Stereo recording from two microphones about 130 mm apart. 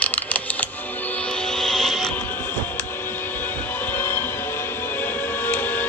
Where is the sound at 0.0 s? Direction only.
10° left (ahead or behind).